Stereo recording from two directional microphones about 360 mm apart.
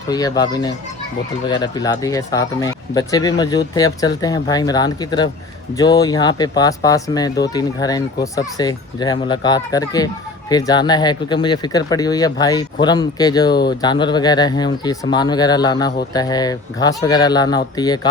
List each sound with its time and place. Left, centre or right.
0.1 s speech: centre
13.5 s speech: left
13.8 s speech: centre